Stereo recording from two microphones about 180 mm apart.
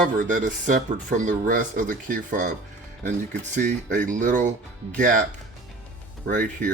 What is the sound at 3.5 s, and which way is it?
Speech, 45° right (ahead or behind).